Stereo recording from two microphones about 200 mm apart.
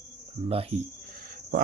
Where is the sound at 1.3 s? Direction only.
45° right (ahead or behind).